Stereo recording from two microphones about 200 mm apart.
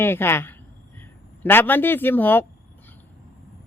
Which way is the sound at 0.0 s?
10° left (ahead or behind).